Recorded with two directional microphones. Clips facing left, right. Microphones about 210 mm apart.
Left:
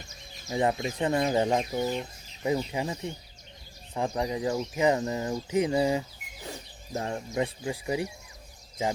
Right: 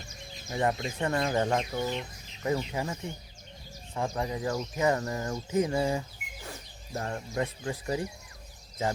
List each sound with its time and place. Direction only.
0.5 s speech: 15° left (ahead or behind)
1.8 s speech: 40° left (ahead or behind)
2.7 s speech: 15° left (ahead or behind)